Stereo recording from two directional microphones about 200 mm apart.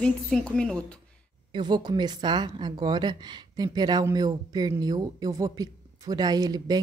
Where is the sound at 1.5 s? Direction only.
20° right (ahead or behind).